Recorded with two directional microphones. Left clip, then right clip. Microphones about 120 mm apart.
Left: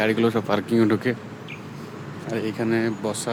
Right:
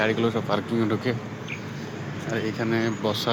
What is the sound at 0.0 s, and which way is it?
Speech, 90° left.